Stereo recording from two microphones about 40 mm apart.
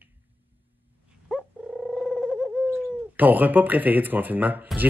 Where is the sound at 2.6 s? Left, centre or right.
Right.